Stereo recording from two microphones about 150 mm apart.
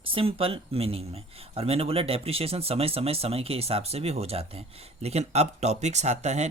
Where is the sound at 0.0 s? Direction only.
40° right (ahead or behind).